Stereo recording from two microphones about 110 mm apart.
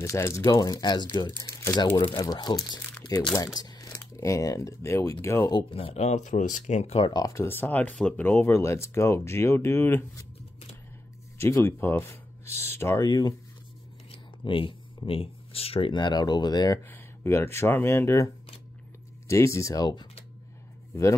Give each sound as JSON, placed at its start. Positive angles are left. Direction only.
{"t": 0.0, "sound": "speech", "side_deg": 25}
{"t": 1.4, "sound": "speech", "side_deg": 30}
{"t": 5.5, "sound": "speech", "side_deg": 50}
{"t": 7.1, "sound": "speech", "side_deg": 35}
{"t": 7.4, "sound": "speech", "side_deg": 20}
{"t": 11.3, "sound": "speech", "side_deg": 25}
{"t": 13.0, "sound": "speech", "side_deg": 40}
{"t": 14.1, "sound": "speech", "side_deg": 50}
{"t": 16.9, "sound": "speech", "side_deg": 25}